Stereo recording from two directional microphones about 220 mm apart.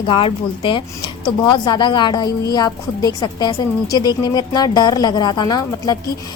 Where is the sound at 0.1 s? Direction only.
25° left (ahead or behind).